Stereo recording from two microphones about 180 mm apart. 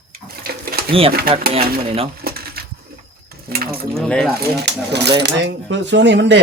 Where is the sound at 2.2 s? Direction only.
60° right (ahead or behind).